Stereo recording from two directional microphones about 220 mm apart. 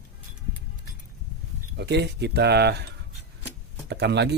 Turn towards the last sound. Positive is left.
turn(degrees=-50)  # may be behind; listen again after turning